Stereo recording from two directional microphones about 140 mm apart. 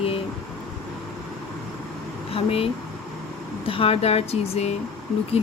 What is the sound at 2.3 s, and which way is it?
Speech, 40° left (ahead or behind).